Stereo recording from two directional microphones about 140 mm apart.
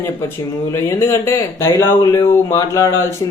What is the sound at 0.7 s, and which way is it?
Speech, 20° left (ahead or behind).